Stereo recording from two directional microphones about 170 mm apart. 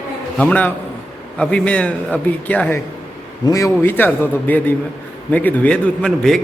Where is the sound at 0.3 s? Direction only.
10° left (ahead or behind).